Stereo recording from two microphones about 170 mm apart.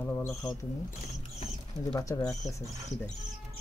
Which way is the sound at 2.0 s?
20° left (ahead or behind).